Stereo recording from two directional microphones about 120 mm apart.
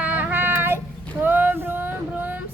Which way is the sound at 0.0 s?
15° right (ahead or behind).